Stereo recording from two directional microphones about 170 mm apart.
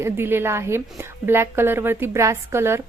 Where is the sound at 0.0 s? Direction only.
15° right (ahead or behind).